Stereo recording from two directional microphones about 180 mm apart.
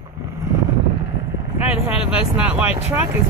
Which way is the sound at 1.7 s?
5° right (ahead or behind).